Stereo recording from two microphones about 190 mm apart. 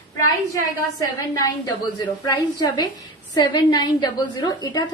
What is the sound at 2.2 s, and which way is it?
A woman's voice, 20° left (ahead or behind).